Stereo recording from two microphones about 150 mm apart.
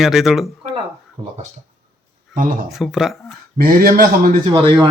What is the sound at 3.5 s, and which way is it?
Speech, 80° right.